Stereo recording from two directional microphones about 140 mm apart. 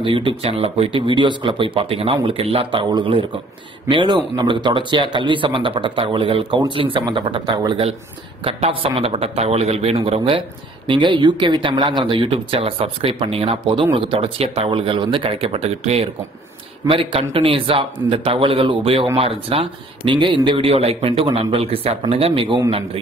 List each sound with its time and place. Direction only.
0.0 s speech: 35° right (ahead or behind)